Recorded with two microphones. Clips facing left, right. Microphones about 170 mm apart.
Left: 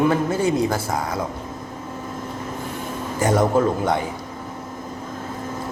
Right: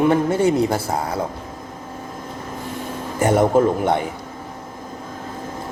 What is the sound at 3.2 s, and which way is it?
Speech, 30° right (ahead or behind).